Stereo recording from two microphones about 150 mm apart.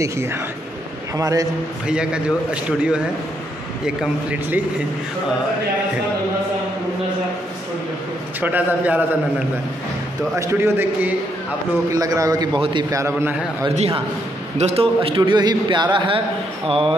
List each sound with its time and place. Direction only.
0.0 s a man's voice: 15° right (ahead or behind)
1.9 s a man's voice: 5° right (ahead or behind)
8.4 s a man's voice: 10° right (ahead or behind)
10.3 s a man's voice: 20° right (ahead or behind)
13.0 s a man's voice: 15° right (ahead or behind)
13.7 s a man's voice: 40° right (ahead or behind)